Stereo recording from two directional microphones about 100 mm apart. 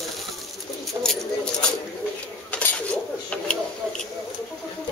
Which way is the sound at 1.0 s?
25° right (ahead or behind).